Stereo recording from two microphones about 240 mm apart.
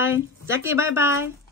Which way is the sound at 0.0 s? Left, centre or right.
Left.